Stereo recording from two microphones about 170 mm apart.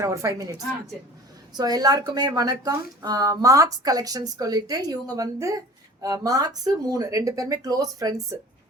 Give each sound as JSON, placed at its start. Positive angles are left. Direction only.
{"t": 0.0, "sound": "speech", "side_deg": -20}